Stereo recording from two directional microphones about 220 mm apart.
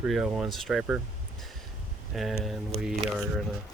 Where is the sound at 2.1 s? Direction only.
Centre (ahead or behind).